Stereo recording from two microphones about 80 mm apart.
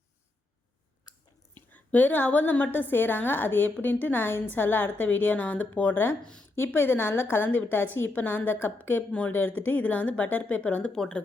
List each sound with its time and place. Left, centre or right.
1.5 s a woman's voice: left